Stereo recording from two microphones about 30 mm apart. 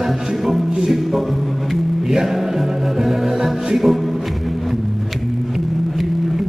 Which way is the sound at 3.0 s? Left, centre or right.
Centre.